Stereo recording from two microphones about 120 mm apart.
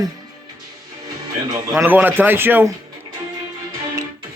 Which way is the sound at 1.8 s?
15° right (ahead or behind).